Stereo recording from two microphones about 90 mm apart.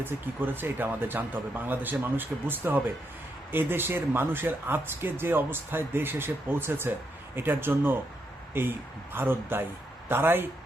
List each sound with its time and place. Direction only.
0.0 s speech: 20° right (ahead or behind)